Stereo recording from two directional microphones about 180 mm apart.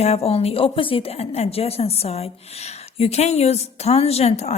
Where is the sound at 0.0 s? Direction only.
35° left (ahead or behind).